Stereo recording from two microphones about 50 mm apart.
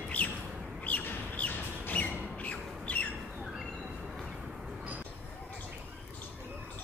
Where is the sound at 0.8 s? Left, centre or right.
Left.